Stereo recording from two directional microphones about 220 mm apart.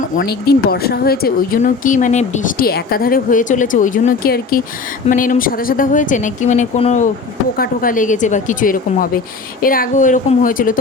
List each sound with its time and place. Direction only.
0.0 s speech: 40° left (ahead or behind)
7.5 s speech: 40° left (ahead or behind)